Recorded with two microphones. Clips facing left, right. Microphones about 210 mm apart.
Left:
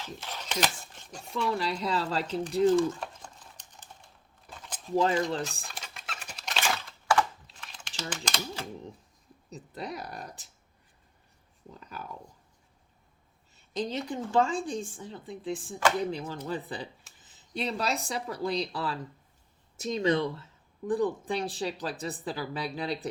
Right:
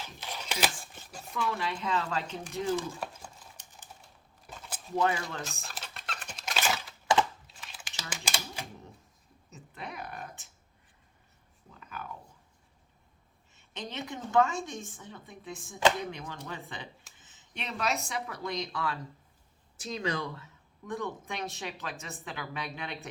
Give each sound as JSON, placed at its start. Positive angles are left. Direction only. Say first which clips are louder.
{"t": 0.0, "sound": "a sound", "louder": "left 2 dB", "side_deg": -10}
{"t": 1.3, "sound": "speech", "louder": "left 3 dB", "side_deg": 35}
{"t": 2.6, "sound": "a sound", "louder": "left 8 dB", "side_deg": -5}
{"t": 4.9, "sound": "speech", "louder": "left 4 dB", "side_deg": 30}
{"t": 5.5, "sound": "a sound", "louder": "even", "side_deg": 0}
{"t": 8.1, "sound": "speech", "louder": "left 2 dB", "side_deg": -10}
{"t": 9.5, "sound": "speech", "louder": "left 6 dB", "side_deg": 35}
{"t": 11.7, "sound": "speech", "louder": "left 1 dB", "side_deg": 35}
{"t": 13.6, "sound": "speech", "louder": "left 7 dB", "side_deg": 35}
{"t": 20.0, "sound": "speech", "louder": "left 8 dB", "side_deg": 25}